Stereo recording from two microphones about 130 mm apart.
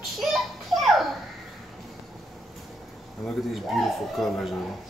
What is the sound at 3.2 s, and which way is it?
Speech, centre (ahead or behind).